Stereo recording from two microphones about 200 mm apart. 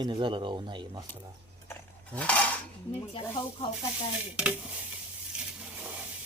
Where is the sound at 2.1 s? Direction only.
5° left (ahead or behind).